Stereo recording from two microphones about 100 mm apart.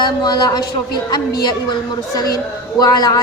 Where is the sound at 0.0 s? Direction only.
45° left (ahead or behind).